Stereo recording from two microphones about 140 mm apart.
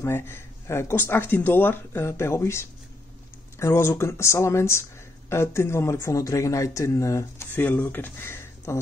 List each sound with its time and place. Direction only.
0.0 s speech: 15° left (ahead or behind)